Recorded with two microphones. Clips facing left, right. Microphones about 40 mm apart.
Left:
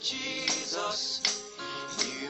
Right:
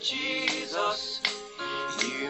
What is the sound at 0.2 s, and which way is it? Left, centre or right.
Music, right.